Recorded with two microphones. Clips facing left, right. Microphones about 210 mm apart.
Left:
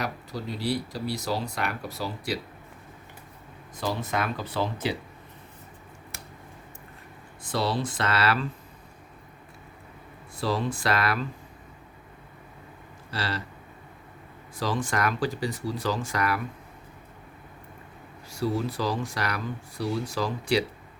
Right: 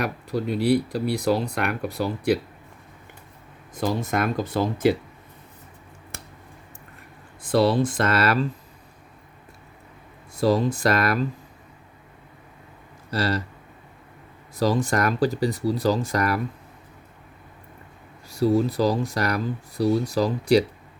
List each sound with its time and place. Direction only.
0.0 s speech: 60° right (ahead or behind)
3.8 s speech: 50° right (ahead or behind)
7.5 s speech: 55° right (ahead or behind)
10.4 s speech: 40° right (ahead or behind)
13.1 s speech: 40° right (ahead or behind)
14.5 s speech: 40° right (ahead or behind)
18.3 s speech: 35° right (ahead or behind)